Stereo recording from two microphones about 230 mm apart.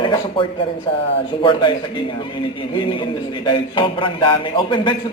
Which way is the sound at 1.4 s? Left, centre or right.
Left.